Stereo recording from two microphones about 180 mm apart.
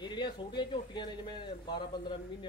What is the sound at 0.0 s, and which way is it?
Speech, 25° left (ahead or behind).